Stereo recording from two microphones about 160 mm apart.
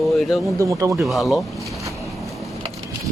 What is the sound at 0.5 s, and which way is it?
Speech, 20° right (ahead or behind).